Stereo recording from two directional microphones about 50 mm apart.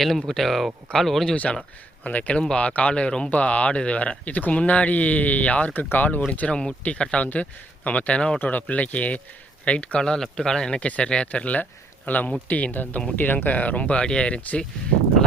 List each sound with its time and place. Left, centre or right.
0.0 s speech: centre
2.0 s speech: left
6.5 s speech: centre
8.4 s speech: left
10.0 s speech: centre
10.8 s speech: left